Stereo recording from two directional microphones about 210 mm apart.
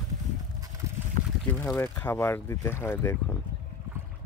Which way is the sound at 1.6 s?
10° left (ahead or behind).